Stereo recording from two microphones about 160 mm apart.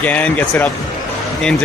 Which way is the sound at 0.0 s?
10° left (ahead or behind).